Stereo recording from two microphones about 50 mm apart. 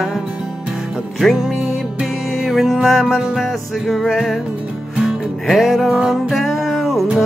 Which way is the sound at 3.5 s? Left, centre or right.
Centre.